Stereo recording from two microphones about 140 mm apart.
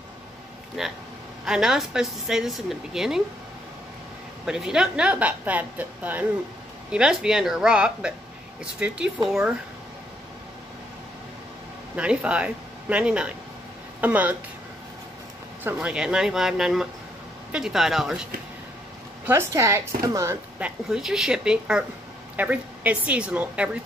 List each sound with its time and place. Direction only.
0.8 s speech: centre (ahead or behind)
4.5 s a woman's voice: 5° right (ahead or behind)
11.9 s a woman's voice: 10° right (ahead or behind)
15.6 s speech: 5° right (ahead or behind)
19.2 s speech: 15° right (ahead or behind)
20.5 s a woman's voice: 5° right (ahead or behind)